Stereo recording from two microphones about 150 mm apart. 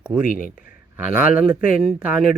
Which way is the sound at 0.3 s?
65° left (ahead or behind).